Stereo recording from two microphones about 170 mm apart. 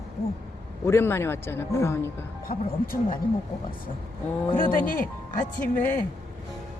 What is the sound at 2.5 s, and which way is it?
Speech, 60° left (ahead or behind).